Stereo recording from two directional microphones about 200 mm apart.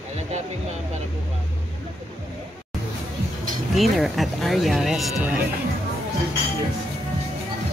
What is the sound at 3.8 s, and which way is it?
Speech, centre (ahead or behind).